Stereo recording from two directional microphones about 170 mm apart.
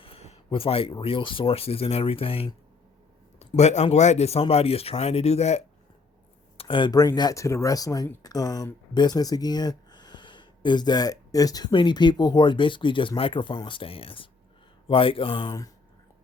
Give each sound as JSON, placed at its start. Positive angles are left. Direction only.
{"t": 0.0, "sound": "speech", "side_deg": 35}
{"t": 6.6, "sound": "speech", "side_deg": 30}